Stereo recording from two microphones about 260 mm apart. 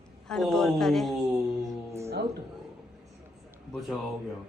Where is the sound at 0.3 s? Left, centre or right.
Centre.